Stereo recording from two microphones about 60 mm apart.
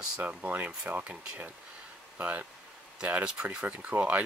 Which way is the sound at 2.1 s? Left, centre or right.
Right.